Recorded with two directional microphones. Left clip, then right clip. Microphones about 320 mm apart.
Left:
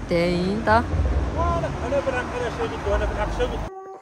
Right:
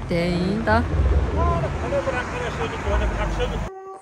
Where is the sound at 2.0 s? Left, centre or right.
Left.